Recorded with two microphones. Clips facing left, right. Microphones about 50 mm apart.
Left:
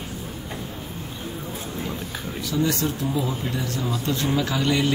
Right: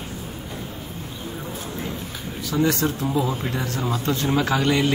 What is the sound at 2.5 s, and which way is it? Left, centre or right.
Speech, right.